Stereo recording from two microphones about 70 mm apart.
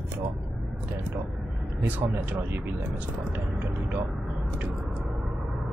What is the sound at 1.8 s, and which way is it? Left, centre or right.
Speech, right.